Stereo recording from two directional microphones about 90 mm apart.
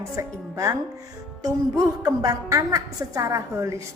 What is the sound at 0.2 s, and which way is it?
Speech, 35° right (ahead or behind).